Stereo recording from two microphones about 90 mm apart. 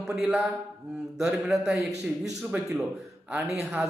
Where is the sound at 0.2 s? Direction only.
5° right (ahead or behind).